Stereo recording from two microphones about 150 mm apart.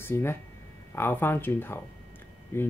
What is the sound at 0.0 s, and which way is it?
A man's voice, 15° left (ahead or behind).